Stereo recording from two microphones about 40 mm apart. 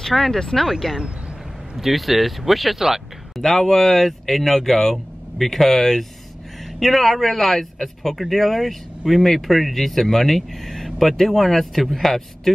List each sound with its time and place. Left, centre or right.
0.0 s speech: centre
0.7 s speech: centre
3.3 s speech: centre